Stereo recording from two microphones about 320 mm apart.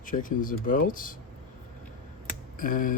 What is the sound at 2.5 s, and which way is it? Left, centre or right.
Speech, left.